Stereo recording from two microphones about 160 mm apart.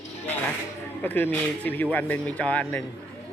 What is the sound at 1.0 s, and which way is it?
Speech, 10° left (ahead or behind).